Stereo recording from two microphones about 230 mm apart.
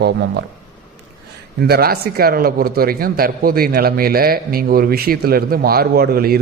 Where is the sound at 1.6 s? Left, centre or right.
Right.